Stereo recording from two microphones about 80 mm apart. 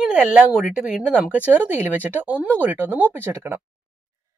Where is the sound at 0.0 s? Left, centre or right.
Centre.